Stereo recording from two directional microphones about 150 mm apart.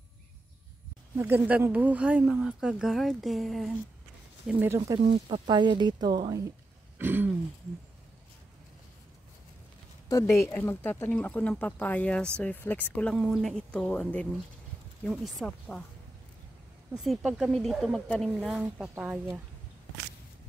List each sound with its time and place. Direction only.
1.1 s speech: 15° right (ahead or behind); by 3.7 s centre (ahead or behind)
4.5 s speech: 15° right (ahead or behind)
5.0 s speech: 30° right (ahead or behind)
7.0 s throat clearing: 15° right (ahead or behind)
10.0 s speech: 20° left (ahead or behind); by 15.8 s 5° left (ahead or behind)
16.9 s speech: 5° right (ahead or behind)
18.6 s speech: 10° right (ahead or behind)